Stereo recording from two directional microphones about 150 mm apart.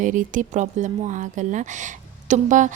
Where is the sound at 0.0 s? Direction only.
60° right (ahead or behind).